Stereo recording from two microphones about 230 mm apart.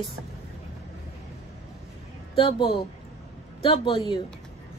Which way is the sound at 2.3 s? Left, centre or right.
Left.